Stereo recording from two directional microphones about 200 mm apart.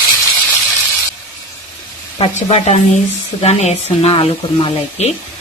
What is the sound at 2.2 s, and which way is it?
Speech, 35° left (ahead or behind).